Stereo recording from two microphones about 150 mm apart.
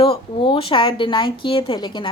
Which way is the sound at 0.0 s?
35° left (ahead or behind).